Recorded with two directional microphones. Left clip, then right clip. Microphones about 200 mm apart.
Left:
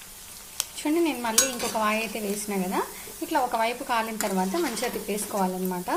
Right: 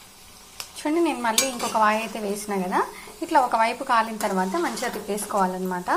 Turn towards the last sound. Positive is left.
turn(degrees=15)  # may be behind; listen again after turning